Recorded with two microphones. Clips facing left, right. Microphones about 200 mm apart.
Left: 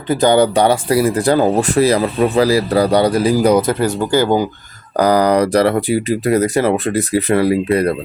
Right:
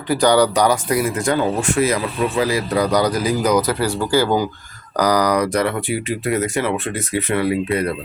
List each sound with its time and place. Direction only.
0.1 s speech: 25° left (ahead or behind)